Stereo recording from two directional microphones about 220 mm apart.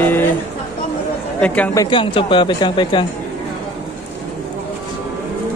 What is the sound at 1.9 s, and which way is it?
Speech, 20° left (ahead or behind).